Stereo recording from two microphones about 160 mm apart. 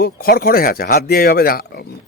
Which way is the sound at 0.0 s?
70° left (ahead or behind).